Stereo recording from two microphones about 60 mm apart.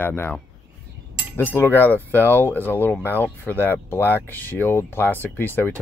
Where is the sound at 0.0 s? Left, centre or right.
Left.